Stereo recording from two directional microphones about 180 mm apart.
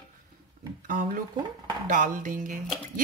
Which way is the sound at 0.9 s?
50° right (ahead or behind).